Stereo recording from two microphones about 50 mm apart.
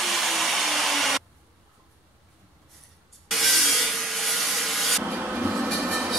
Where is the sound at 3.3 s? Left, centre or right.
Centre.